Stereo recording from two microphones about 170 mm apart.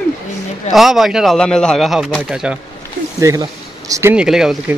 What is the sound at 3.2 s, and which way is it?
Speech, 20° right (ahead or behind).